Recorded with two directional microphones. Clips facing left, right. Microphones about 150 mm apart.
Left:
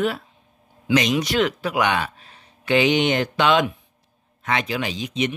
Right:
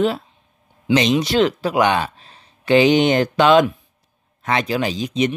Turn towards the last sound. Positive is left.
turn(degrees=-40)  # may be behind; listen again after turning